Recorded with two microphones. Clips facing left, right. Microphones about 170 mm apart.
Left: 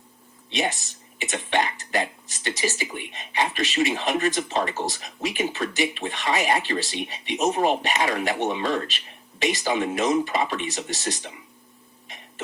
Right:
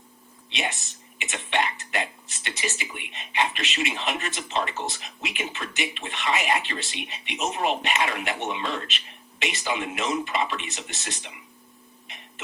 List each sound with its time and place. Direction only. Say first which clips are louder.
0.5 s speech: left 5 dB; 35° left (ahead or behind)